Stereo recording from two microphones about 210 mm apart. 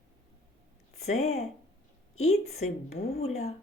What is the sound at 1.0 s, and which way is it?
A woman's voice, 30° left (ahead or behind).